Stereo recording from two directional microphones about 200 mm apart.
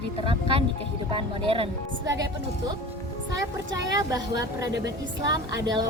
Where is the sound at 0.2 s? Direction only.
25° right (ahead or behind).